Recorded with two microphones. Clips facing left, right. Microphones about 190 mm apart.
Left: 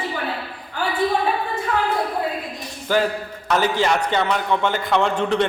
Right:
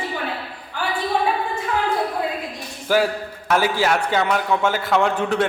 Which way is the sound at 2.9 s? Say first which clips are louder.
Right 1 dB; 10° right (ahead or behind).